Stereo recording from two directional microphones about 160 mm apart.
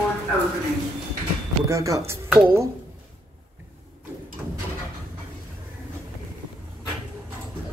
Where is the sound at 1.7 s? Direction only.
20° right (ahead or behind).